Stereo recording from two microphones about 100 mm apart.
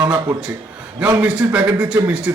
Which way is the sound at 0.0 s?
35° right (ahead or behind).